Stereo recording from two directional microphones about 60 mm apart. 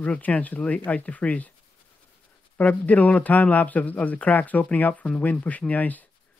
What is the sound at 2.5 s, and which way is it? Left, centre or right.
Speech, left.